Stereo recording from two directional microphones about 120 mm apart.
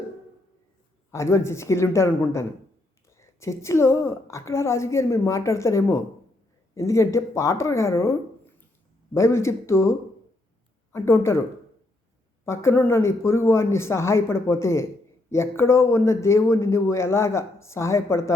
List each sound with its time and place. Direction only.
1.1 s speech: 25° left (ahead or behind)
9.1 s speech: 25° left (ahead or behind)
10.9 s speech: 25° left (ahead or behind)
12.5 s speech: 20° left (ahead or behind)